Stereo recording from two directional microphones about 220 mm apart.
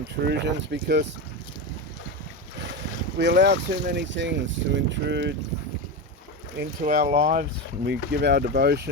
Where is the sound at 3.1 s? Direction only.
50° right (ahead or behind).